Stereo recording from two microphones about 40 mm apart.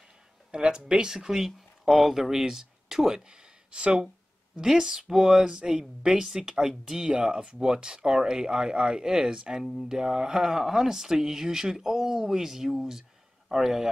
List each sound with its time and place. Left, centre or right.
0.5 s speech: right
1.3 s speech: centre
3.3 s a sound: right
4.6 s speech: centre
9.6 s speech: centre